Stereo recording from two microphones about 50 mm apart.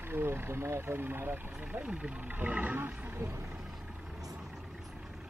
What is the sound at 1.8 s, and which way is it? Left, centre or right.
Speech, right.